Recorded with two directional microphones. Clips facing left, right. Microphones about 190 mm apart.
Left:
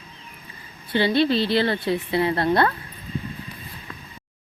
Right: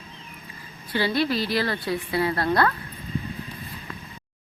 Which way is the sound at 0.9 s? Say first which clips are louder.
Left 4 dB; 25° left (ahead or behind).